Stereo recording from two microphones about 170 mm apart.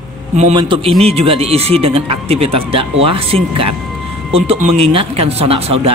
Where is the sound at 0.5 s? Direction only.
30° right (ahead or behind).